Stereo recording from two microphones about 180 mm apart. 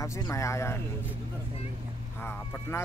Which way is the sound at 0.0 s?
15° left (ahead or behind).